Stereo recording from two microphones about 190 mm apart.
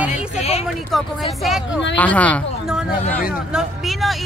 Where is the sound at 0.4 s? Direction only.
35° left (ahead or behind).